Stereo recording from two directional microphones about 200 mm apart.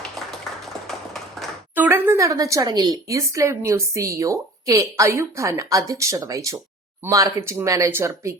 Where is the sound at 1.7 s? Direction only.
10° right (ahead or behind).